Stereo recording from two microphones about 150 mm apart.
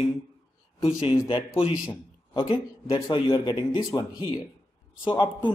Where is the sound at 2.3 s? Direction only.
35° left (ahead or behind).